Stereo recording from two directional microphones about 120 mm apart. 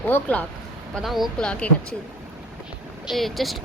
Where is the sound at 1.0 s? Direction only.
Centre (ahead or behind).